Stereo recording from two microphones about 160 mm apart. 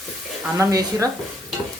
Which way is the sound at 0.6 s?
20° right (ahead or behind).